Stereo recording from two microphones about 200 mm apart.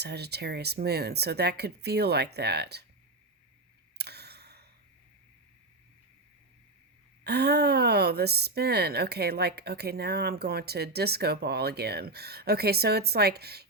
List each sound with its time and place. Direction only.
0.0 s speech: 55° right (ahead or behind)
3.9 s a sound: 55° right (ahead or behind)
7.3 s speech: 55° right (ahead or behind)